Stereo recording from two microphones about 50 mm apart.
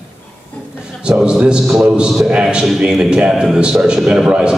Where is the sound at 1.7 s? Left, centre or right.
Centre.